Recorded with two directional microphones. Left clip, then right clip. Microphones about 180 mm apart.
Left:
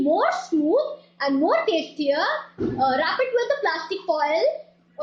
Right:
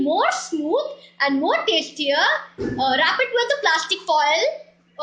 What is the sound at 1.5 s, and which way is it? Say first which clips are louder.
A woman's voice: right 1 dB; 35° left (ahead or behind).